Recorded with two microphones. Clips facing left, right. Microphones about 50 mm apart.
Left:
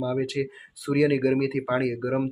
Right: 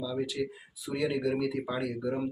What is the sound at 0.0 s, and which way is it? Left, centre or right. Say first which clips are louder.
Speech: left 6 dB; left.